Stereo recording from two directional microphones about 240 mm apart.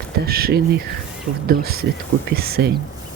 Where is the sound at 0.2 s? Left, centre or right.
Right.